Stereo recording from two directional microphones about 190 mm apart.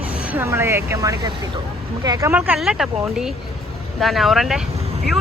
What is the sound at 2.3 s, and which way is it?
Speech, 5° right (ahead or behind).